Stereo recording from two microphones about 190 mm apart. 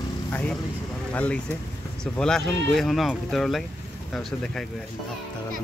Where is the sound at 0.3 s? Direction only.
5° left (ahead or behind).